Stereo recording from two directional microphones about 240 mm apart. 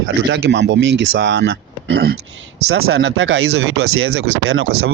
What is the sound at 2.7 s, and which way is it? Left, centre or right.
Speech, right.